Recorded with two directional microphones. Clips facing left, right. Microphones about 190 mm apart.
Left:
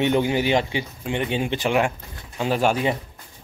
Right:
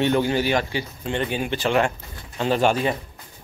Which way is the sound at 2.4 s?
5° left (ahead or behind).